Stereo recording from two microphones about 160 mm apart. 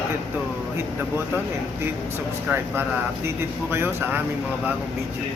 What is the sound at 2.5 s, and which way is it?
Speech, 10° right (ahead or behind).